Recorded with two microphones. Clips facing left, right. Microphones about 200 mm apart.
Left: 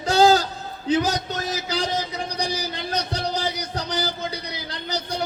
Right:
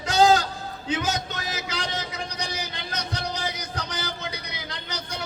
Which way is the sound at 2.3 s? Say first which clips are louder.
Left 6 dB; 35° left (ahead or behind).